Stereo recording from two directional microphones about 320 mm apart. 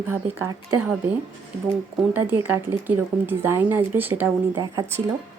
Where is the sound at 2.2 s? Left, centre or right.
Centre.